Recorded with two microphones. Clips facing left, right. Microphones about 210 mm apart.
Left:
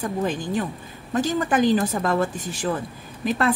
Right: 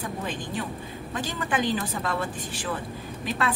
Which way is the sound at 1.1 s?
45° left (ahead or behind).